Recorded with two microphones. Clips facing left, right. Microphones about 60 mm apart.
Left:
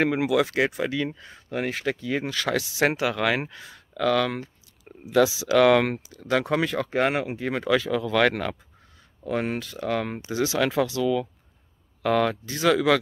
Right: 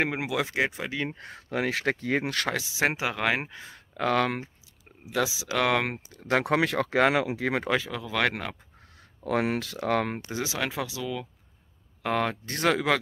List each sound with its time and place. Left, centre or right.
0.0 s speech: right
1.1 s speech: right
1.9 s speech: right
2.5 s speech: right
5.1 s speech: centre
6.2 s speech: right
7.9 s speech: centre
9.2 s speech: right
9.8 s speech: right
10.3 s speech: centre